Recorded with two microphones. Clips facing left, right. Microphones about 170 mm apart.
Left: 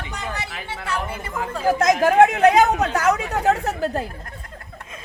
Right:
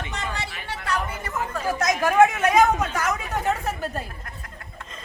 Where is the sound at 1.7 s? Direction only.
60° left (ahead or behind).